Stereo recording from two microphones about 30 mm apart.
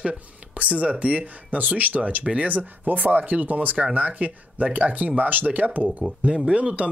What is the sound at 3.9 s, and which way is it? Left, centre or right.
Speech, right.